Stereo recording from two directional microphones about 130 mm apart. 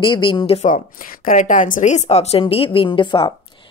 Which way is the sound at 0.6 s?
90° left.